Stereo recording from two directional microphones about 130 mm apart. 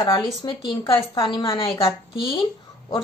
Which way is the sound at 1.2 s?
40° left (ahead or behind).